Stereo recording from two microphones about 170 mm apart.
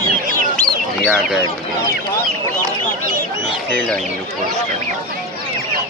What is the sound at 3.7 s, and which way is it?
Speech, 5° left (ahead or behind).